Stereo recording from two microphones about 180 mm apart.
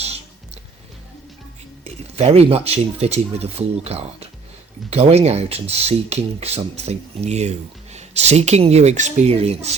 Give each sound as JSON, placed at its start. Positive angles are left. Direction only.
{"t": 1.8, "sound": "speech", "side_deg": -35}